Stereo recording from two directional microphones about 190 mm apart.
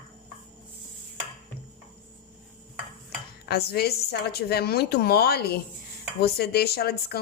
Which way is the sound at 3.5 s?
55° left (ahead or behind).